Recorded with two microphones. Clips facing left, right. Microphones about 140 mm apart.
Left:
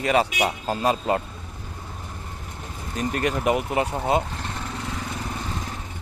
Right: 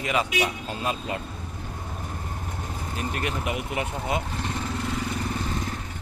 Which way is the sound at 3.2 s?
40° left (ahead or behind).